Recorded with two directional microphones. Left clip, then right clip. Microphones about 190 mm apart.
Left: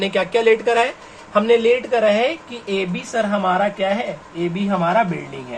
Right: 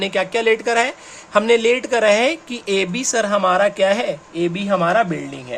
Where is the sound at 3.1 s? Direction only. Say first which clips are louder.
Right 2 dB; 65° right (ahead or behind).